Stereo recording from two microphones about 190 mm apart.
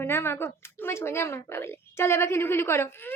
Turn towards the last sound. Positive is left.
turn(degrees=10)  # may be behind; listen again after turning